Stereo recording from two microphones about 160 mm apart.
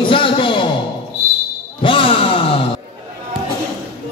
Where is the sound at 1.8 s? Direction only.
30° left (ahead or behind).